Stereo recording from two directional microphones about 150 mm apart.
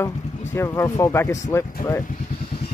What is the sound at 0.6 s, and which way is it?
Speech, 20° left (ahead or behind).